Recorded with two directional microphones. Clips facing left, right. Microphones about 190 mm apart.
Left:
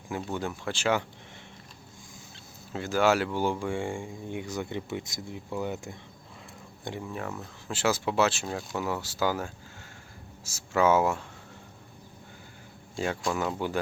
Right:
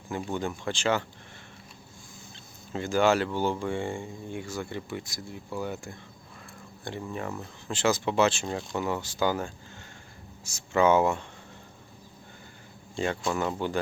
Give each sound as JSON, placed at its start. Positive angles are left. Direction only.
{"t": 0.3, "sound": "speech", "side_deg": 5}
{"t": 2.3, "sound": "speech", "side_deg": 5}
{"t": 7.0, "sound": "speech", "side_deg": 0}
{"t": 13.0, "sound": "speech", "side_deg": 5}